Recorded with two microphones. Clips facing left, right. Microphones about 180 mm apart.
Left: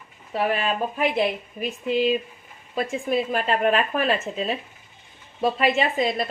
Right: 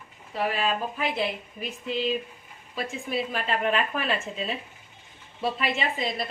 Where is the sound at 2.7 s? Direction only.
50° left (ahead or behind).